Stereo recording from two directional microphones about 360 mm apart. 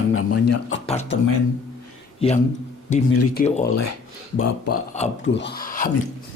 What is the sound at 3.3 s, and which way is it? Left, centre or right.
Speech, left.